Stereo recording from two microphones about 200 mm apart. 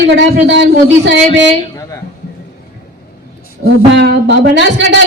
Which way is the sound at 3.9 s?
60° right (ahead or behind).